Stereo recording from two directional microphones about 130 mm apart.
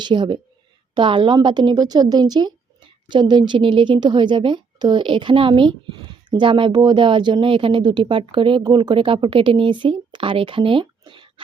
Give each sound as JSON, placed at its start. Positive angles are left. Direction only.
{"t": 0.0, "sound": "a woman's voice", "side_deg": -35}